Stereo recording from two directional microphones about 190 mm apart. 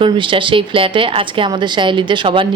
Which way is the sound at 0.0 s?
25° right (ahead or behind).